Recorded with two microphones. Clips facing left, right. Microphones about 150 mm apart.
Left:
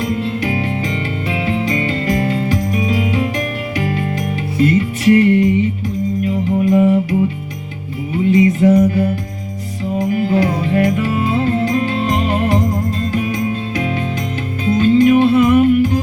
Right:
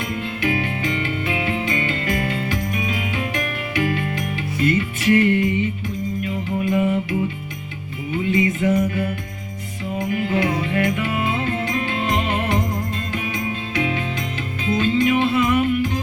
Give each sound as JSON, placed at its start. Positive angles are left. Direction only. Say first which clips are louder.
{"t": 0.0, "sound": "music", "louder": "left 5 dB", "side_deg": 35}